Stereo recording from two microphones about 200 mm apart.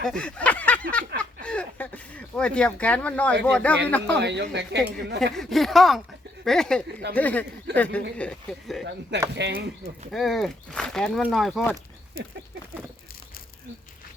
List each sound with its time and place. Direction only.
0.0 s speech: 5° left (ahead or behind)
4.2 s speech: 60° right (ahead or behind)
5.3 s speech: centre (ahead or behind)
8.8 s speech: 55° right (ahead or behind)
10.1 s speech: centre (ahead or behind)